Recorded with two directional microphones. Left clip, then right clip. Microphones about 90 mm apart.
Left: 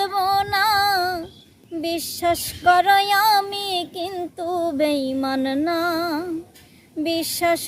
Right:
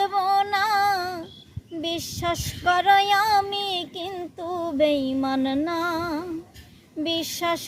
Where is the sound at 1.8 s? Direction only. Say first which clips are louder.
Left 4 dB; 35° left (ahead or behind).